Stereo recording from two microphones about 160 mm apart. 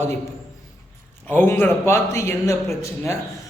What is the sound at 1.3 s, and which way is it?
A man's voice, 15° left (ahead or behind).